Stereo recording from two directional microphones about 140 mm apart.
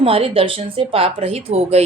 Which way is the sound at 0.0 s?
40° right (ahead or behind).